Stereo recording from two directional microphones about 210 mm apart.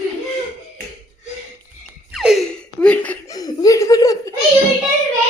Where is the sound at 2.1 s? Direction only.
Centre (ahead or behind); by 4.3 s 15° left (ahead or behind).